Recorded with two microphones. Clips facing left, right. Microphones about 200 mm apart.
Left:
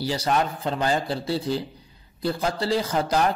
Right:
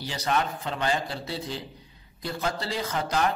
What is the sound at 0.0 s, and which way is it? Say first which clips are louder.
Speech: left 4 dB; 30° left (ahead or behind).